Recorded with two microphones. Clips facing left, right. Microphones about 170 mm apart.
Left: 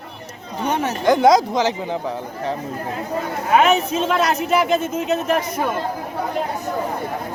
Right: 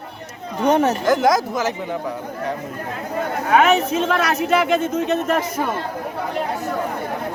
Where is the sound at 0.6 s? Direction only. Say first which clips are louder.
Right 6 dB; 45° right (ahead or behind).